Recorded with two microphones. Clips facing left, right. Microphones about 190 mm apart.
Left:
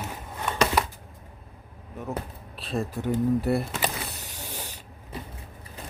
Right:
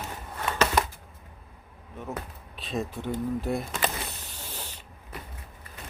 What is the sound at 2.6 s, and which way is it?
Speech, centre (ahead or behind).